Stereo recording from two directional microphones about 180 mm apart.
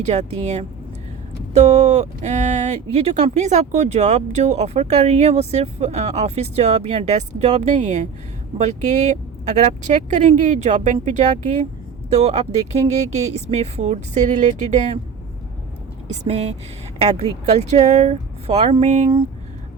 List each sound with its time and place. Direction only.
0.0 s speech: 40° right (ahead or behind)
16.2 s speech: 35° right (ahead or behind)